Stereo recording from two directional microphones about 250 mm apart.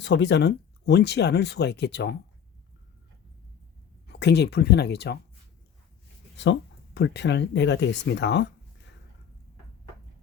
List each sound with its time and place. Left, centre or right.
0.0 s speech: left
4.0 s speech: left
6.3 s speech: left